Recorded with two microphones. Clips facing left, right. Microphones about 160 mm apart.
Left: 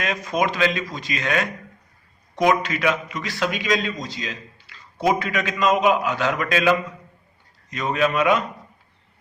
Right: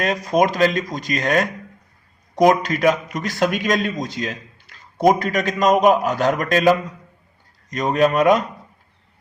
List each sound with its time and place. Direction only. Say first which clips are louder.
0.0 s a man's voice: right 5 dB; 35° right (ahead or behind)